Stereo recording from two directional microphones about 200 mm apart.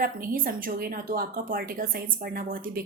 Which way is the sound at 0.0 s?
45° right (ahead or behind).